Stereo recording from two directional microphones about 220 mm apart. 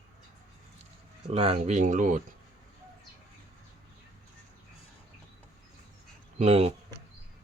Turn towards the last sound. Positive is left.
turn(degrees=-25)  # may be behind; listen again after turning